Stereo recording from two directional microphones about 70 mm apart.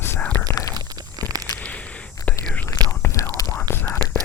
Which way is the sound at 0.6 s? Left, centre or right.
Left.